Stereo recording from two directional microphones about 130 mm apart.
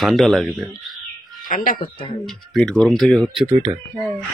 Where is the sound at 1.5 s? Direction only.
90° left.